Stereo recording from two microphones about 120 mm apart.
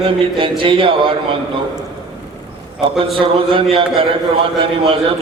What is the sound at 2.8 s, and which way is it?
Speech, 45° right (ahead or behind).